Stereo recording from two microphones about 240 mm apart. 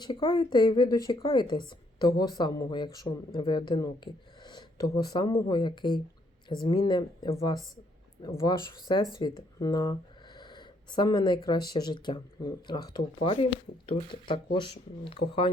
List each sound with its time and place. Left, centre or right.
0.0 s speech: centre